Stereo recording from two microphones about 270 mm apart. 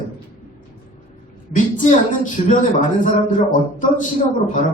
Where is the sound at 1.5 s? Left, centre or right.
Left.